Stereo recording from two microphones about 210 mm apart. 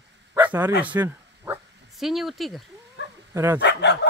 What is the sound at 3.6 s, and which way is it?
Speech, 55° left (ahead or behind).